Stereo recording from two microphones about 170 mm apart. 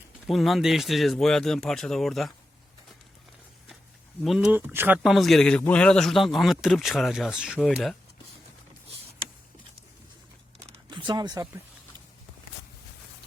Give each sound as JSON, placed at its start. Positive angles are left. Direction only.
{"t": 0.3, "sound": "speech", "side_deg": 0}
{"t": 4.2, "sound": "speech", "side_deg": -5}
{"t": 10.9, "sound": "speech", "side_deg": -25}